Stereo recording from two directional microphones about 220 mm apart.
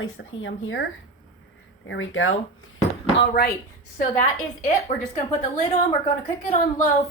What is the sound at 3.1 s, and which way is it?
Speech, 45° left (ahead or behind).